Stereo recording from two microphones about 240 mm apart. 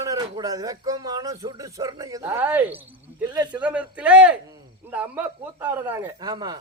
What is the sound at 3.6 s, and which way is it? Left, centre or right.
A man's voice, centre.